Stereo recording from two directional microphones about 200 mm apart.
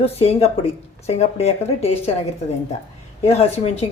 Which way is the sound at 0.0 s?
30° left (ahead or behind).